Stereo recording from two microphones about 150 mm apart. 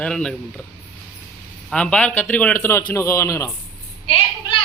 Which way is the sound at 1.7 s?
5° left (ahead or behind).